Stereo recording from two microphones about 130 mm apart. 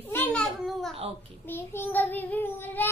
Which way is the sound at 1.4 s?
15° left (ahead or behind).